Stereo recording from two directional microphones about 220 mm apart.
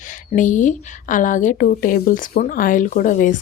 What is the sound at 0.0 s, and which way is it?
A woman's voice, 35° left (ahead or behind).